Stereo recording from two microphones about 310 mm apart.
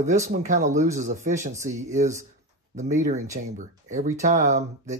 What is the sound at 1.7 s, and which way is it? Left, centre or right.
Speech, centre.